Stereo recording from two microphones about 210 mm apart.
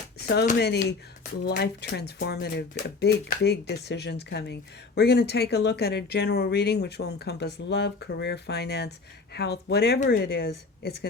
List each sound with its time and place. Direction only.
0.2 s speech: 50° left (ahead or behind)